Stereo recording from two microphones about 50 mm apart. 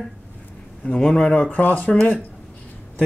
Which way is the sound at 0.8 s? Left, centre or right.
Centre.